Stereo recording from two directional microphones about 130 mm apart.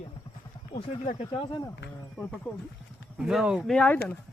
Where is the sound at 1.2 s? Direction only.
45° left (ahead or behind).